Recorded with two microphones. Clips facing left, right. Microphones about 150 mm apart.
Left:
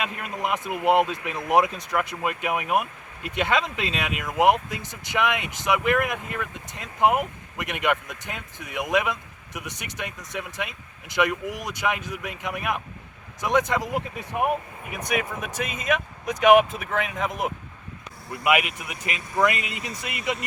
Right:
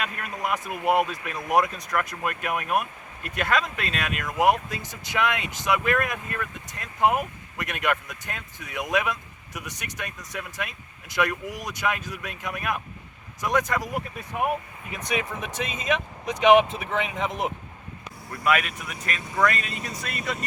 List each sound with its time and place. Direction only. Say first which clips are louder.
0.0 s speech: left 2 dB; 20° left (ahead or behind); by 17.5 s centre (ahead or behind)
18.3 s speech: left 2 dB; 15° left (ahead or behind)